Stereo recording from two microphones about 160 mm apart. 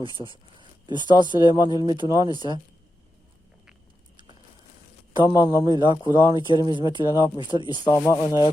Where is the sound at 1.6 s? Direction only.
25° left (ahead or behind).